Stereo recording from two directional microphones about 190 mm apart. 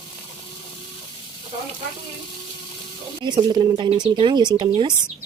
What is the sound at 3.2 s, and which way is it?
Speech, 20° right (ahead or behind).